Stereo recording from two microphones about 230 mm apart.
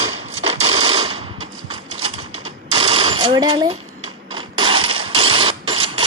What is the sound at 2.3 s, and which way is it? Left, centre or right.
Mechanisms, right.